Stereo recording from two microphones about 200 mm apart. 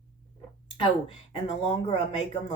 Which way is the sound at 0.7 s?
25° left (ahead or behind).